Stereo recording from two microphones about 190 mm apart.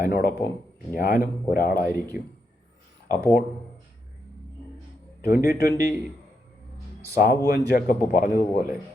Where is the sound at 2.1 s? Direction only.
5° right (ahead or behind).